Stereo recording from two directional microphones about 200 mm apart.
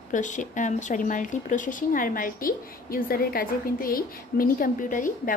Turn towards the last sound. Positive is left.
turn(degrees=40)  # may be behind; listen again after turning